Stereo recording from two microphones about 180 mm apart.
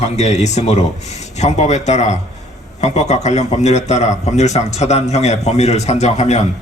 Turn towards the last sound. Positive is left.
turn(degrees=40)  # may be behind; listen again after turning